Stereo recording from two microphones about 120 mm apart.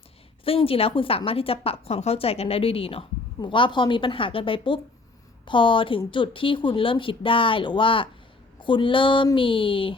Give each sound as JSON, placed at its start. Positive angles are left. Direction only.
{"t": 0.4, "sound": "a woman's voice", "side_deg": 50}